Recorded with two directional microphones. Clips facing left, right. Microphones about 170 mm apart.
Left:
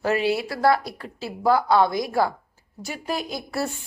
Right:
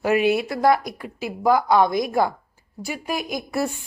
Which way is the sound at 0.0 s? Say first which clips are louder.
Right 3 dB; 15° right (ahead or behind).